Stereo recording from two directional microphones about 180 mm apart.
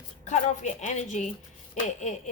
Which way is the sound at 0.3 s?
40° left (ahead or behind).